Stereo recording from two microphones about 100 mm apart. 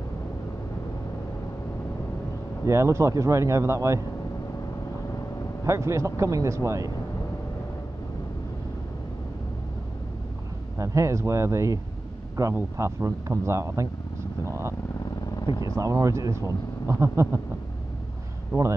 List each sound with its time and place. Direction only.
2.6 s speech: 30° right (ahead or behind)
5.7 s speech: 30° right (ahead or behind)
10.8 s speech: 30° right (ahead or behind)
15.3 s vehicle: 45° left (ahead or behind)
15.7 s speech: 35° right (ahead or behind)
18.5 s speech: 30° right (ahead or behind)